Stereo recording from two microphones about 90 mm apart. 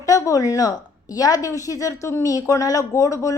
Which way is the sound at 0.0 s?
40° left (ahead or behind).